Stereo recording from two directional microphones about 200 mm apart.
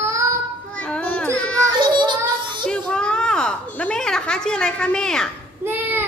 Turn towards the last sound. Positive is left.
turn(degrees=-10)  # may be behind; listen again after turning